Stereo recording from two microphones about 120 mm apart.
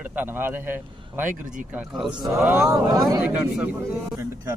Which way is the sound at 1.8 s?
5° right (ahead or behind).